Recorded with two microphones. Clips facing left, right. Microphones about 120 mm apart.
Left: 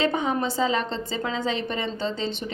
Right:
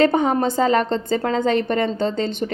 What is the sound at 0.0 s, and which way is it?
A woman's voice, 50° right (ahead or behind).